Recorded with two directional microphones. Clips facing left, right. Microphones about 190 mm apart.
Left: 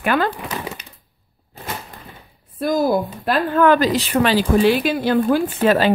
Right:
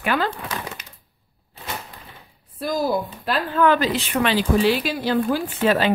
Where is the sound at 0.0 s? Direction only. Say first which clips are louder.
Left 4 dB; 50° left (ahead or behind).